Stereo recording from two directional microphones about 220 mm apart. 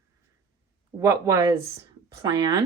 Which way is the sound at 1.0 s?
15° right (ahead or behind).